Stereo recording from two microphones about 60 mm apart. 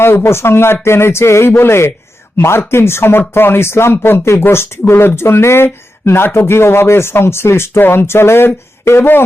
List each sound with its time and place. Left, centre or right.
0.0 s speech: left